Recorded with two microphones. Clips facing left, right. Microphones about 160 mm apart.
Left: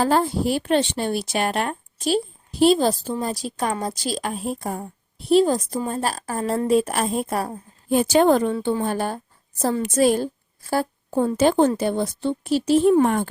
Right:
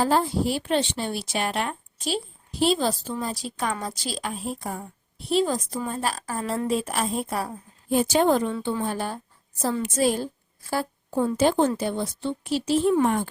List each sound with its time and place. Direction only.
0.0 s a woman's voice: 60° left (ahead or behind)